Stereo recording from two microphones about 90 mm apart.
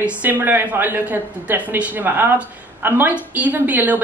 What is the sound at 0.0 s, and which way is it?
Speech, 20° right (ahead or behind).